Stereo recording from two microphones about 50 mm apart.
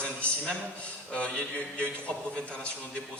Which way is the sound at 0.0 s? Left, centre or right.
Left.